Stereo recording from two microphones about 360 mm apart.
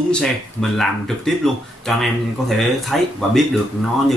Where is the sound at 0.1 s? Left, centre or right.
Centre.